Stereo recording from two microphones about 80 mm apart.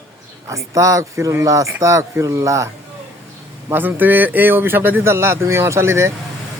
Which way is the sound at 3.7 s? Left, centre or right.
Right.